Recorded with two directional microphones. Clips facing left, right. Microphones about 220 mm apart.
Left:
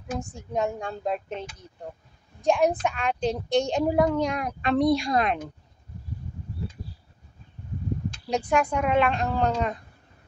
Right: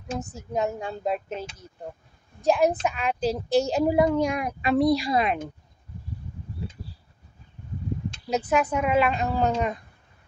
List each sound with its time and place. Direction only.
0.2 s a woman's voice: 5° right (ahead or behind)
2.4 s a woman's voice: 5° right (ahead or behind)
8.3 s a woman's voice: 5° right (ahead or behind)